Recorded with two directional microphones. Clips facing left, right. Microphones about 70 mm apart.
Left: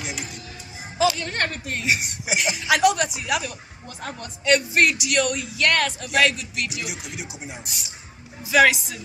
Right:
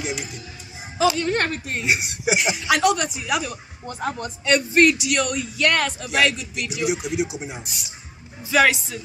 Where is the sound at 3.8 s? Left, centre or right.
Centre.